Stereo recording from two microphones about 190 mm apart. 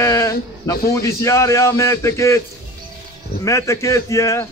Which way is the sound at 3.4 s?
15° left (ahead or behind).